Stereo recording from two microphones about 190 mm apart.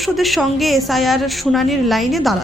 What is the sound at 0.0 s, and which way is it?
Speech, centre (ahead or behind).